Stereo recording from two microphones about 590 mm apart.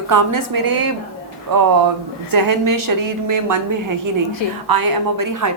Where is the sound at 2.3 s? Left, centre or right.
Right.